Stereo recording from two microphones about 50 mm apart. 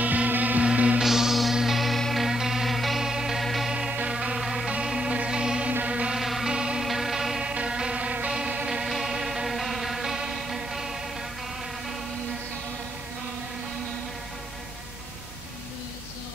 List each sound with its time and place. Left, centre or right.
0.0 s music: right
0.7 s music: right
1.0 s music: centre
2.2 s music: centre
4.1 s music: centre
4.4 s music: centre
4.6 s music: centre
5.7 s music: right
6.1 s music: centre
6.5 s music: centre
6.8 s music: centre
8.8 s music: centre